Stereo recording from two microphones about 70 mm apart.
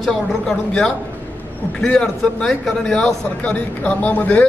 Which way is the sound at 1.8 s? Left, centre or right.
Centre.